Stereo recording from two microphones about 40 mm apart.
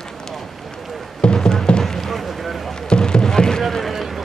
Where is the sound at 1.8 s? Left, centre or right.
Centre.